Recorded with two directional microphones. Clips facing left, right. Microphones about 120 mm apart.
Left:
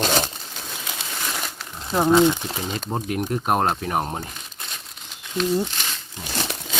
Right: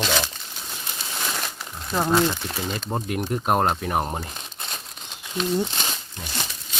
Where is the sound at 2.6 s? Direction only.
Centre (ahead or behind).